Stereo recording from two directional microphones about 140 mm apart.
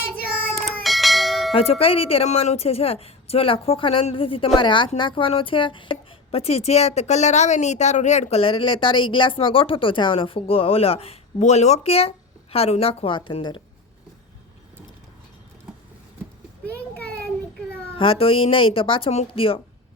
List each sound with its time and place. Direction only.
0.6 s bell: centre (ahead or behind)
1.5 s a woman's voice: 45° left (ahead or behind)
16.6 s a sound: 10° left (ahead or behind)
17.9 s speech: 40° left (ahead or behind)